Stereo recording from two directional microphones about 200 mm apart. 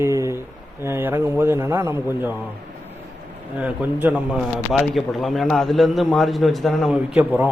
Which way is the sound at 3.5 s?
10° right (ahead or behind).